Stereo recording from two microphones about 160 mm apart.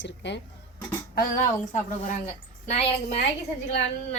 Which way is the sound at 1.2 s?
55° left (ahead or behind).